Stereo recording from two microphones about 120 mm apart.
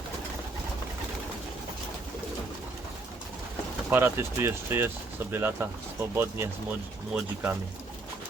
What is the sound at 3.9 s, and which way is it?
Speech, 20° right (ahead or behind).